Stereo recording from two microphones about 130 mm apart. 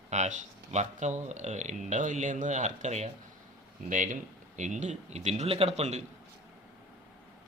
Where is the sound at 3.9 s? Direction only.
80° right.